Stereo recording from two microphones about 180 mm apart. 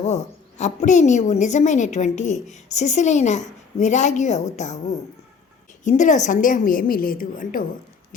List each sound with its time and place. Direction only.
0.6 s a woman's voice: 40° left (ahead or behind)
5.8 s a woman's voice: 45° left (ahead or behind)